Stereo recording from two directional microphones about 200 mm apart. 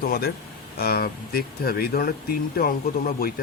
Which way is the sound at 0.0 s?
50° left (ahead or behind).